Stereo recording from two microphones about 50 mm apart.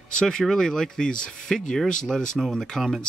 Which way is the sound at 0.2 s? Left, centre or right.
Centre.